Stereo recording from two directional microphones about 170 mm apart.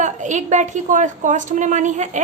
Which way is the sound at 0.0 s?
45° right (ahead or behind).